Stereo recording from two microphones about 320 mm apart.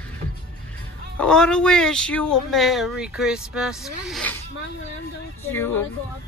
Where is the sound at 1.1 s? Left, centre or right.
Centre.